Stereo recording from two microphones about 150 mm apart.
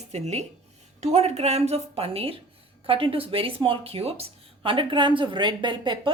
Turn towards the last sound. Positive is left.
turn(degrees=-30)  # may be behind; listen again after turning